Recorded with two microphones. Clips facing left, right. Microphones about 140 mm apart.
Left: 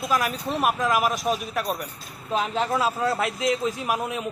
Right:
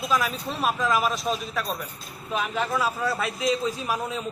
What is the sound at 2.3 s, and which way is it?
Speech, 25° left (ahead or behind).